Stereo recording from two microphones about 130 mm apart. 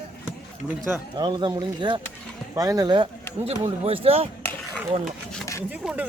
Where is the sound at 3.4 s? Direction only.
50° right (ahead or behind).